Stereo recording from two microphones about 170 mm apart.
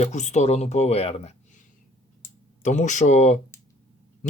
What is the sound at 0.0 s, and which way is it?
Speech, 45° left (ahead or behind).